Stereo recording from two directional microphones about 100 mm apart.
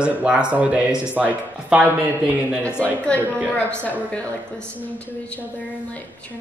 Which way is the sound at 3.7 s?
15° left (ahead or behind).